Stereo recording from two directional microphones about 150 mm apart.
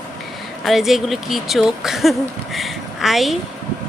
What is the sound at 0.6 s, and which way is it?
Speech, centre (ahead or behind).